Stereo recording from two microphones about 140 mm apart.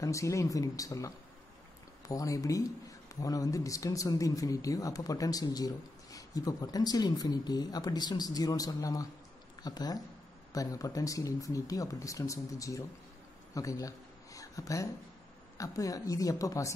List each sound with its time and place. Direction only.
0.0 s speech: 20° left (ahead or behind)